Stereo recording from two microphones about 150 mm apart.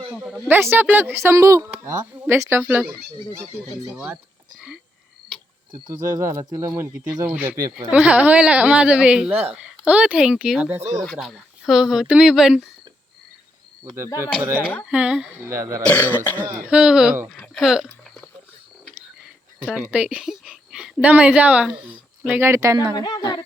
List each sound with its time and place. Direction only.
0.2 s speech: 5° right (ahead or behind)
3.9 s speech: 15° right (ahead or behind)
5.9 s speech: 20° right (ahead or behind)
11.0 s speech: centre (ahead or behind)
14.8 s speech: 5° right (ahead or behind)
15.4 s speech: 20° right (ahead or behind)
15.9 s throat clearing: 10° left (ahead or behind)
16.4 s speech: 10° right (ahead or behind)
17.4 s hiccup: centre (ahead or behind)
19.5 s a woman's voice: 10° right (ahead or behind)
23.0 s speech: 25° left (ahead or behind)